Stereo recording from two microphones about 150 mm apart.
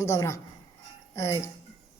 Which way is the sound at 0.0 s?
20° left (ahead or behind).